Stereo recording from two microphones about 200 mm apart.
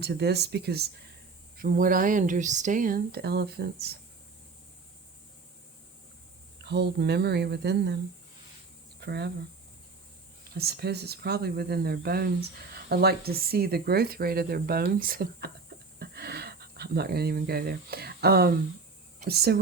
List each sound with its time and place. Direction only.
0.0 s speech: 55° right (ahead or behind)
6.6 s speech: 55° right (ahead or behind)
9.0 s speech: 55° right (ahead or behind)
10.5 s speech: 55° right (ahead or behind)